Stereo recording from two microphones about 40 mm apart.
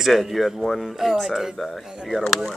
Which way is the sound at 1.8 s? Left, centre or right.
Centre.